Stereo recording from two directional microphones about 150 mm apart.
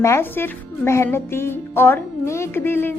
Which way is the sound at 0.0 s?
15° left (ahead or behind).